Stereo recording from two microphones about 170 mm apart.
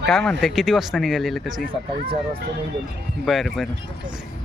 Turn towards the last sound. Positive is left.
turn(degrees=0)  # may be behind; listen again after turning